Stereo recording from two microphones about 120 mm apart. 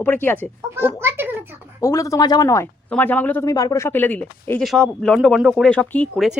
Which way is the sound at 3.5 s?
30° left (ahead or behind).